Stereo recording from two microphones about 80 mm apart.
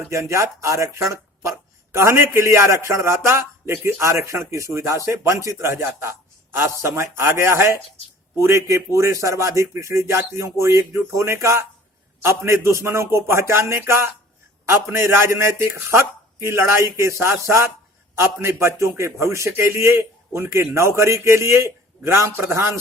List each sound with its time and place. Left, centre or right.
0.1 s speech: right